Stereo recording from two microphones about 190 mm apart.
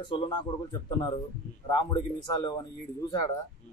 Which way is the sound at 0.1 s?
20° left (ahead or behind).